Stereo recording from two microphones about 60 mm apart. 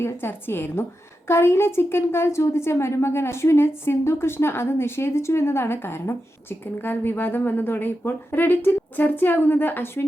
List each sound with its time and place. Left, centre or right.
0.0 s a woman's voice: left